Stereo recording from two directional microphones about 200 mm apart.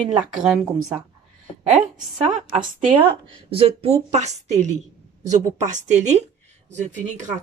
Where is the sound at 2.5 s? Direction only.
30° right (ahead or behind).